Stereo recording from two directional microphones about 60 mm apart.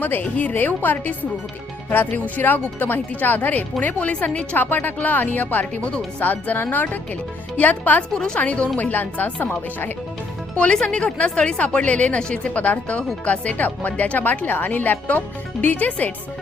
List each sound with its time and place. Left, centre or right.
0.0 s speech: left
8.1 s speech: centre; by 9.5 s left
10.6 s speech: centre